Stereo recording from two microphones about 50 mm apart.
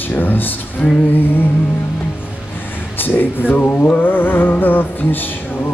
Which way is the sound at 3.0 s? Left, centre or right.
Left.